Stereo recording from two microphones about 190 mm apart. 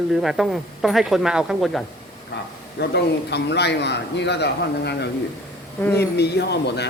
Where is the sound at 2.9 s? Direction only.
60° left (ahead or behind).